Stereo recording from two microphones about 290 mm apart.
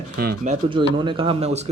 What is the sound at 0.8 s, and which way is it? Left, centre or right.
Speech, centre.